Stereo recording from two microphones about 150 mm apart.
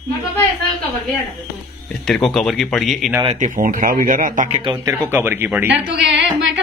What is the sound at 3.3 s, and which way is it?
Speech, 60° right (ahead or behind).